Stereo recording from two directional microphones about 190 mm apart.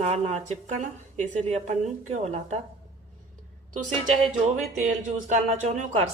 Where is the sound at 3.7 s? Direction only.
40° right (ahead or behind).